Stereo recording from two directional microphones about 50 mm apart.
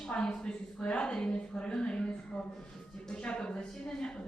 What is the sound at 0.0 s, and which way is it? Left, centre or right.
A woman's voice, centre.